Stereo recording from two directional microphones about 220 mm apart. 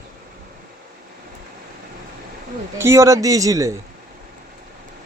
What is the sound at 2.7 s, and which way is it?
Speech, 10° right (ahead or behind).